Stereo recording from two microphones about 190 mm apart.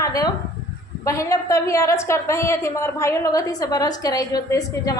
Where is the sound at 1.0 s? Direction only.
15° left (ahead or behind).